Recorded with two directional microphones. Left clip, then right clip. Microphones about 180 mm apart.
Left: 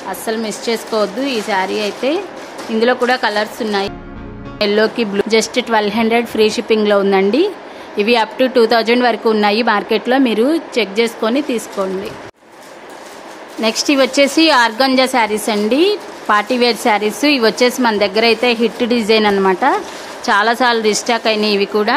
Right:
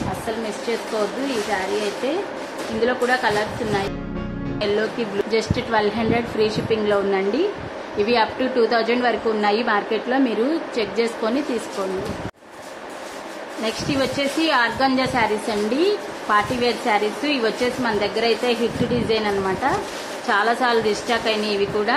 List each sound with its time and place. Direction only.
0.7 s a woman's voice: 70° left (ahead or behind)
8.0 s a woman's voice: 45° left (ahead or behind)
13.6 s a woman's voice: 55° left (ahead or behind)